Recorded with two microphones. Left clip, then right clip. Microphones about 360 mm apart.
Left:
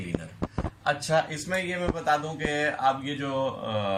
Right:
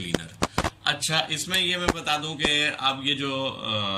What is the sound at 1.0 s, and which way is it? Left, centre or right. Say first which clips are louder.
Speech: even; centre.